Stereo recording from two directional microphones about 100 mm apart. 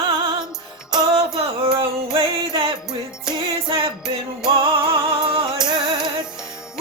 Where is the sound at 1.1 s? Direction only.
70° right (ahead or behind).